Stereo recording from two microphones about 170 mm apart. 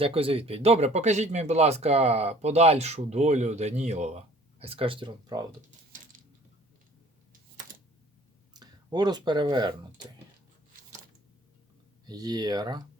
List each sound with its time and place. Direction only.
0.0 s speech: 35° right (ahead or behind)
8.5 s speech: 25° right (ahead or behind)
12.0 s speech: 25° right (ahead or behind)